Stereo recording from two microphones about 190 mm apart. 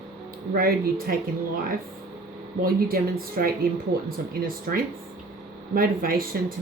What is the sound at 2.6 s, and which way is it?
Speech, 50° right (ahead or behind).